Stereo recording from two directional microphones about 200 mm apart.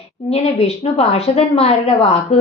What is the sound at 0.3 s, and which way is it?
A woman's voice, 30° left (ahead or behind).